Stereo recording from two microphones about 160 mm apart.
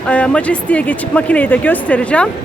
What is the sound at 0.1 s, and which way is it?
Speech, 10° left (ahead or behind).